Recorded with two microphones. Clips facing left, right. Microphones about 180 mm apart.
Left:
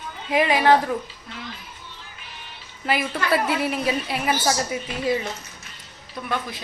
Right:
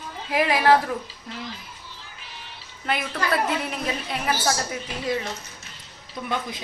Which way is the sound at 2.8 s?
5° left (ahead or behind).